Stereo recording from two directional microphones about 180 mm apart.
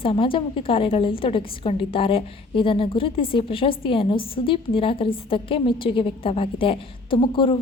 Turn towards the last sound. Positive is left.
turn(degrees=30)  # may be behind; listen again after turning